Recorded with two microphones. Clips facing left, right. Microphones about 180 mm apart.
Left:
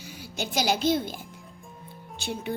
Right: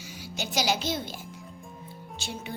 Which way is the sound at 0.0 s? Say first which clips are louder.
Left 2 dB; 55° left (ahead or behind).